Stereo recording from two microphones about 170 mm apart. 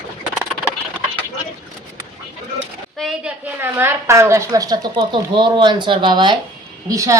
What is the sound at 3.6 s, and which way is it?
A woman's voice, 15° right (ahead or behind).